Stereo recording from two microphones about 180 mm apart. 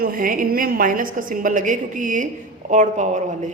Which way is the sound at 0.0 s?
50° right (ahead or behind).